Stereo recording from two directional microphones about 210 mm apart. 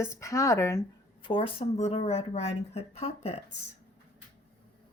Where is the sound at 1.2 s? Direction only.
25° left (ahead or behind).